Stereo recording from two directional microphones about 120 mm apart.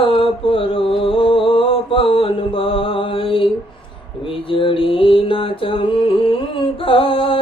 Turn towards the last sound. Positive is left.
turn(degrees=50)  # may be behind; listen again after turning